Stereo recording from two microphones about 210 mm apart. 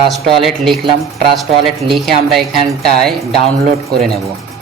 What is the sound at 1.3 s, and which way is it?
Speech, centre (ahead or behind).